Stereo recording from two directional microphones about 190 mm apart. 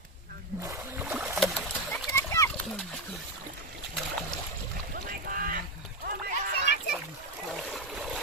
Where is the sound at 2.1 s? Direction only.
15° left (ahead or behind).